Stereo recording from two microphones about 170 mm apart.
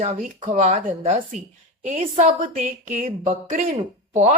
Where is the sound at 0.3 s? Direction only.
30° right (ahead or behind); by 3.1 s 50° right (ahead or behind).